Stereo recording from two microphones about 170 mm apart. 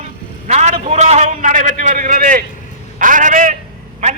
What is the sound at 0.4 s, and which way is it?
A man's voice, 45° right (ahead or behind).